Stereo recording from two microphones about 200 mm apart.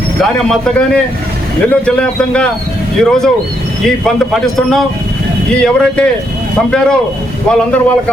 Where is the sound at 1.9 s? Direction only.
5° left (ahead or behind).